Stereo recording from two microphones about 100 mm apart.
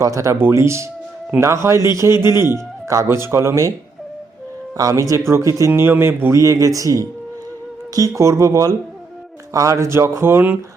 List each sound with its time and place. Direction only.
0.0 s speech: 30° right (ahead or behind)
4.8 s speech: 35° right (ahead or behind)